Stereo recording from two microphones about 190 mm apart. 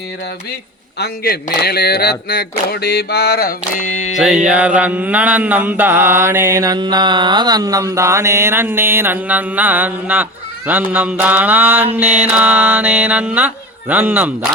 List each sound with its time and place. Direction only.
0.9 s speech: 55° left (ahead or behind)
3.8 s music: 40° left (ahead or behind)
4.1 s mantra: centre (ahead or behind)